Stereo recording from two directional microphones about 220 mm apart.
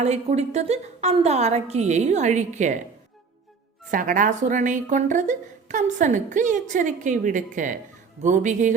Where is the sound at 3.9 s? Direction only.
35° right (ahead or behind).